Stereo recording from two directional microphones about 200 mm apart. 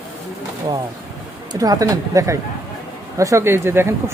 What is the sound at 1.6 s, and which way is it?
Speech, 20° right (ahead or behind).